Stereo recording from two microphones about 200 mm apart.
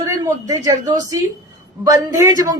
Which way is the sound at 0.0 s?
15° right (ahead or behind).